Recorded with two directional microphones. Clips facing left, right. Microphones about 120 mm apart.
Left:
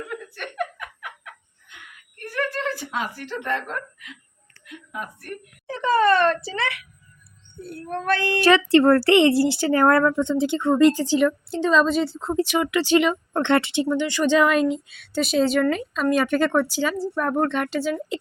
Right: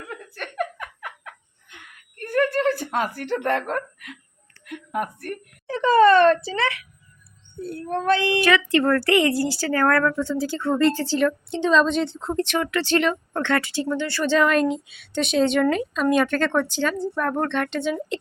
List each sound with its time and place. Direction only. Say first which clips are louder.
0.3 s giggle: right 3 dB; 35° right (ahead or behind)
2.1 s a sound: right 6 dB; 50° right (ahead or behind)
4.6 s a woman's voice: right 7 dB; 55° right (ahead or behind)
5.6 s a child's voice: right 3 dB; 30° right (ahead or behind)
7.9 s speech: right 3 dB; 25° right (ahead or behind)
8.4 s speech: left 3 dB; 30° left (ahead or behind); by 17.9 s 5° left (ahead or behind)